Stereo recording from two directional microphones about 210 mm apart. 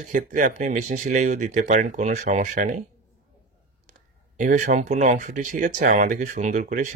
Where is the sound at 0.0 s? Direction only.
40° right (ahead or behind).